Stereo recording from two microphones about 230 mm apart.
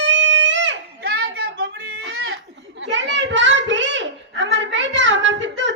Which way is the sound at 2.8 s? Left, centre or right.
Right.